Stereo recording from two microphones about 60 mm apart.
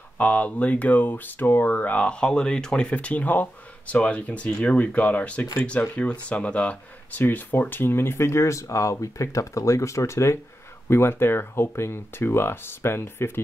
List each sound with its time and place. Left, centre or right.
0.2 s speech: left
7.2 s speech: left
10.9 s speech: left